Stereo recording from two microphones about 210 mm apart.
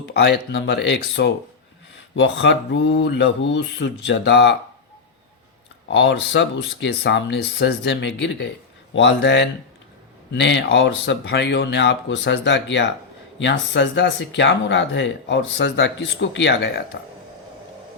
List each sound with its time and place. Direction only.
0.0 s speech: 50° left (ahead or behind)
5.9 s speech: 55° left (ahead or behind)